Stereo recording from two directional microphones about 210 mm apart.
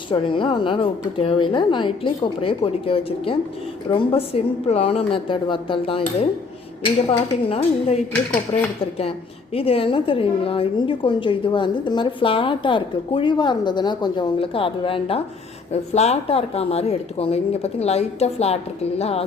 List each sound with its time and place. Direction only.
0.1 s a woman's voice: 25° left (ahead or behind)
9.6 s a woman's voice: 25° left (ahead or behind)